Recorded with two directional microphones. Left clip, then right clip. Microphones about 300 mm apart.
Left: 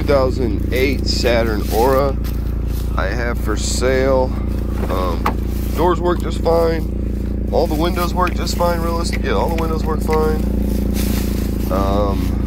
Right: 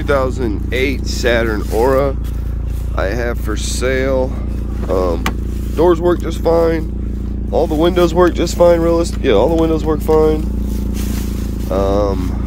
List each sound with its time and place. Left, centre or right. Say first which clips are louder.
0.1 s speech: even; centre
4.9 s speech: right 4 dB; right
7.8 s speech: right 7 dB; right
11.7 s speech: right 4 dB; centre